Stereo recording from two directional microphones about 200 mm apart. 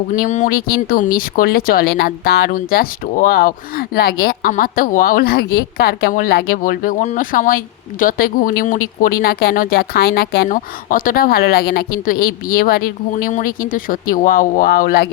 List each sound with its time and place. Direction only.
0.1 s speech: 40° left (ahead or behind)